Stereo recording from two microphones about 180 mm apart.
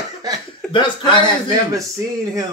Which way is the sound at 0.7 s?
25° left (ahead or behind).